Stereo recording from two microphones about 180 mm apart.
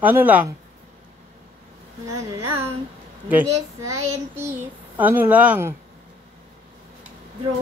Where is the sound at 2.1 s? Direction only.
15° right (ahead or behind).